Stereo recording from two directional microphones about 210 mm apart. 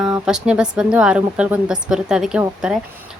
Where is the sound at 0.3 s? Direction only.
5° right (ahead or behind).